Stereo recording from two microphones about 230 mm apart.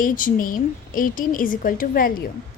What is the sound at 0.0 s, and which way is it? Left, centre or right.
A woman's voice, left.